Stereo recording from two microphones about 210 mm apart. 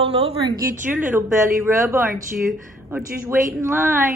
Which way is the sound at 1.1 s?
10° right (ahead or behind).